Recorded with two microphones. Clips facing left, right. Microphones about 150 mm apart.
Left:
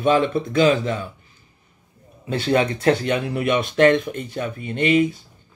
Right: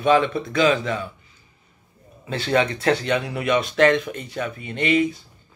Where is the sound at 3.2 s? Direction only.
50° left (ahead or behind).